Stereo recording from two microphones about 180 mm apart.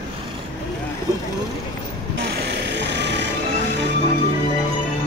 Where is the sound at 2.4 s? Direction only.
70° right (ahead or behind).